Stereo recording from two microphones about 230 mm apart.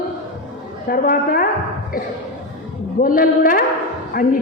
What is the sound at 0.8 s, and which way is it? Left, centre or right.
Speech, left.